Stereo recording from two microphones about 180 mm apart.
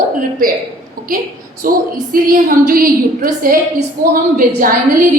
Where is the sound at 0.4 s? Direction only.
50° right (ahead or behind).